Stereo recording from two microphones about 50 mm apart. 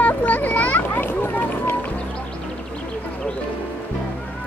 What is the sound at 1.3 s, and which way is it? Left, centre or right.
Speech, left.